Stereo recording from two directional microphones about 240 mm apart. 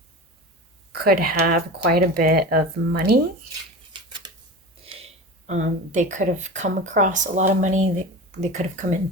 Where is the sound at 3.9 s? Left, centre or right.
Centre.